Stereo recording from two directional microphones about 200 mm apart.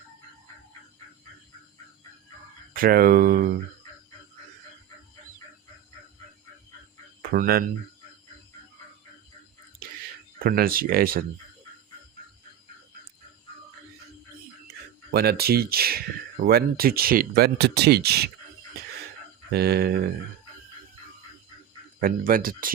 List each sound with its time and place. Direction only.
2.7 s speech: 45° right (ahead or behind)
7.2 s speech: 50° right (ahead or behind)
10.4 s speech: 45° right (ahead or behind)
15.1 s speech: 50° right (ahead or behind)
19.5 s speech: 55° right (ahead or behind)
22.0 s speech: 45° right (ahead or behind)